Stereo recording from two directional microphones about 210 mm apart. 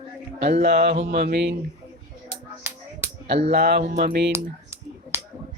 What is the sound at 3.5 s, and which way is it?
Speech, 50° right (ahead or behind).